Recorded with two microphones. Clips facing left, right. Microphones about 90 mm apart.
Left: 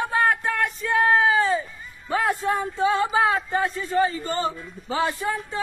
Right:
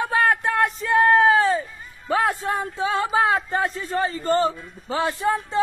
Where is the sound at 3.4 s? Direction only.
40° right (ahead or behind).